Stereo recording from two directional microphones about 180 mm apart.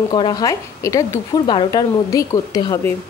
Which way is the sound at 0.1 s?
25° left (ahead or behind).